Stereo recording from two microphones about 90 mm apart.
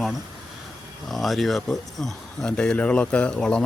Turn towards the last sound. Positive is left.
turn(degrees=10)  # may be behind; listen again after turning